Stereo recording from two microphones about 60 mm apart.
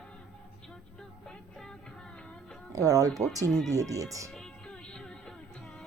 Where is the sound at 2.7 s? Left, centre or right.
Right.